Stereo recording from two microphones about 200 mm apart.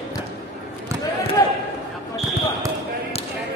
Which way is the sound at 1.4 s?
15° left (ahead or behind).